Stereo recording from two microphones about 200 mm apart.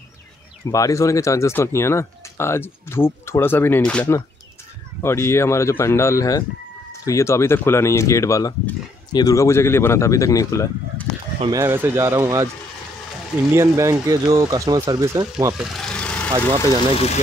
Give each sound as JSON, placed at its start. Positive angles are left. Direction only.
{"t": 0.7, "sound": "speech", "side_deg": 15}
{"t": 11.4, "sound": "speech", "side_deg": -15}
{"t": 13.5, "sound": "speech", "side_deg": -15}
{"t": 15.5, "sound": "vehicle", "side_deg": 0}